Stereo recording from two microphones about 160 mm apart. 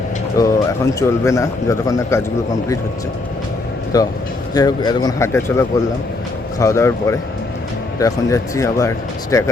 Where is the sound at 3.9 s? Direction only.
20° left (ahead or behind).